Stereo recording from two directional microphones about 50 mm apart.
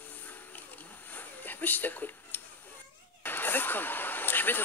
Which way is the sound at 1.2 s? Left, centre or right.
Left.